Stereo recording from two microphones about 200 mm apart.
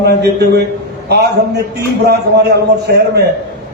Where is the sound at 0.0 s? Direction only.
55° right (ahead or behind).